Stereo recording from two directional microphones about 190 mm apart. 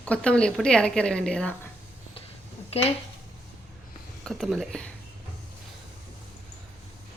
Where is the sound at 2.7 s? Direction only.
30° left (ahead or behind).